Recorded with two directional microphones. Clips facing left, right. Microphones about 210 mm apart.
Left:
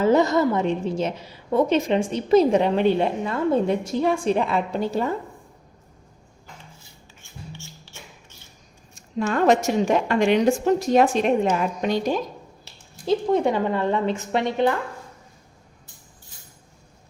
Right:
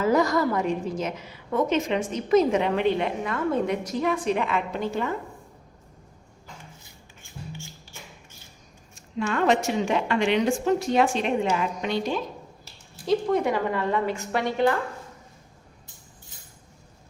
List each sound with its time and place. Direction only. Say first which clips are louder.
0.0 s a woman's voice: left 4 dB; 25° left (ahead or behind)
9.1 s a woman's voice: left 4 dB; 40° left (ahead or behind)
13.1 s a woman's voice: left 2 dB; 25° left (ahead or behind)